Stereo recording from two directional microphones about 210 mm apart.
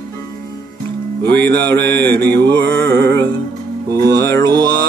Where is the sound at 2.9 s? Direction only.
55° right (ahead or behind).